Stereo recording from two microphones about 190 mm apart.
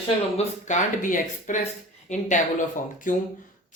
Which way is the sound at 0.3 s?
40° left (ahead or behind).